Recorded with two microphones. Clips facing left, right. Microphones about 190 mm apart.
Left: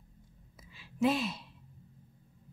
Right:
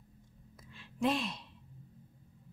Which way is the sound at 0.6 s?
5° left (ahead or behind).